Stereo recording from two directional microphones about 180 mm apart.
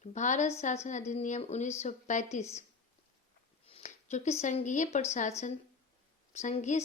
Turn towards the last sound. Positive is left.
turn(degrees=40)  # may be behind; listen again after turning